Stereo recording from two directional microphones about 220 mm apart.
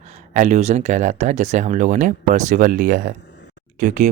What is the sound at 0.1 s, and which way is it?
Speech, 30° right (ahead or behind).